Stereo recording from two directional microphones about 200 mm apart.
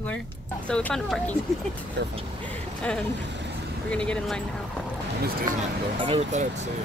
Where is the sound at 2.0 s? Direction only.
60° right (ahead or behind).